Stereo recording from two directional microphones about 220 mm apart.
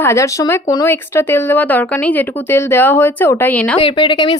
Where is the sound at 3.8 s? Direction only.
20° left (ahead or behind).